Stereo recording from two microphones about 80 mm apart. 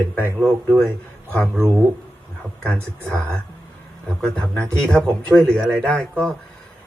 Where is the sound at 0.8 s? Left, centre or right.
Left.